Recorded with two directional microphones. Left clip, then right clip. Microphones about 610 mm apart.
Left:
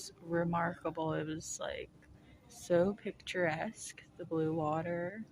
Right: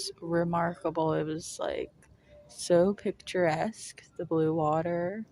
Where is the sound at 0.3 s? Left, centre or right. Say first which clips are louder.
Right 5 dB; left.